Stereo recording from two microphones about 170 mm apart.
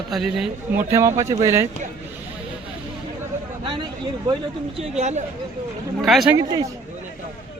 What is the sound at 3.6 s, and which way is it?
Speech, 30° right (ahead or behind).